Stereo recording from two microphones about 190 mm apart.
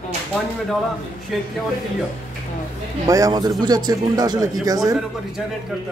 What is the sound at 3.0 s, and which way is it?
Speech, 20° right (ahead or behind).